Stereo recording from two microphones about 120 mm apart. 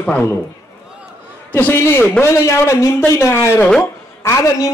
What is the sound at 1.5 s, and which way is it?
A man's voice, 20° left (ahead or behind).